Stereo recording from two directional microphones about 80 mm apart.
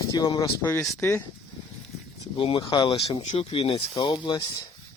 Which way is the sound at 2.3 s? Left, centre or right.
Left.